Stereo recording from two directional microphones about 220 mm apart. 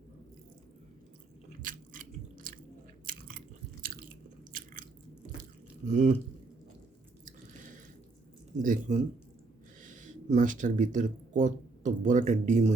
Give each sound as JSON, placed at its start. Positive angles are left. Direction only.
{"t": 1.6, "sound": "biting", "side_deg": -40}
{"t": 5.8, "sound": "speech", "side_deg": -35}
{"t": 7.3, "sound": "drip", "side_deg": -35}
{"t": 8.6, "sound": "speech", "side_deg": -35}